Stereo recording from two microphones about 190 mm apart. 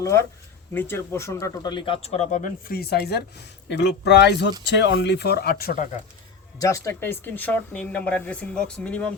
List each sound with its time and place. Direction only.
0.7 s speech: 10° left (ahead or behind); by 5.9 s 50° left (ahead or behind)
6.6 s speech: 15° left (ahead or behind)